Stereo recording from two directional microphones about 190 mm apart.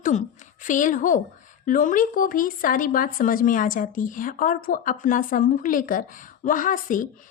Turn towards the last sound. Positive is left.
turn(degrees=45)  # may be behind; listen again after turning